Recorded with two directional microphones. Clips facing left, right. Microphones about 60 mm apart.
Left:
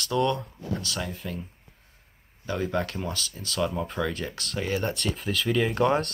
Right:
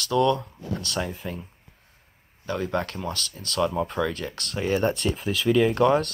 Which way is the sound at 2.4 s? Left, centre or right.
Centre.